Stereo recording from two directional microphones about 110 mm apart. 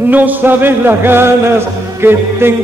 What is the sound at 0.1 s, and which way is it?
Music, 15° right (ahead or behind).